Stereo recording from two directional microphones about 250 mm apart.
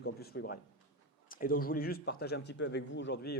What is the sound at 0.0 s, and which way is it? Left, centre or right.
Speech, left.